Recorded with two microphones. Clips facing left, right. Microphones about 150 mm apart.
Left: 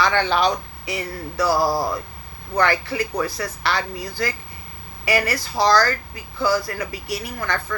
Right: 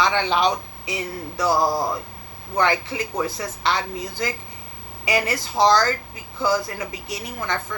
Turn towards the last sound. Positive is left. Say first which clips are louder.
# left 1 dB
turn(degrees=-20)  # may be behind; listen again after turning